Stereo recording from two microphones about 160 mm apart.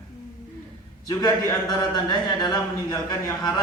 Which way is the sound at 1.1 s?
20° left (ahead or behind).